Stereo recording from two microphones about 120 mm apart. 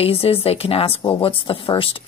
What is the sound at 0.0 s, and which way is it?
Speech, 55° left (ahead or behind).